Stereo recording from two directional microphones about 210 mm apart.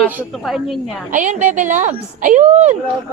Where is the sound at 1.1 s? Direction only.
35° right (ahead or behind).